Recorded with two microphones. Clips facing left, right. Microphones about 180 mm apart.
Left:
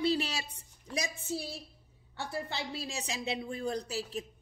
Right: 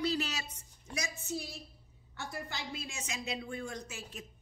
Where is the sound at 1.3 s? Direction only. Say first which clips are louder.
Left 2 dB; 30° left (ahead or behind).